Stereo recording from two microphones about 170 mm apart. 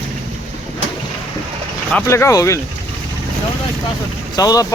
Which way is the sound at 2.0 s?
15° left (ahead or behind).